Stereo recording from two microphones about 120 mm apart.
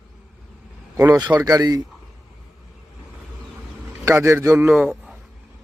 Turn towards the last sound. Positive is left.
turn(degrees=-10)  # may be behind; listen again after turning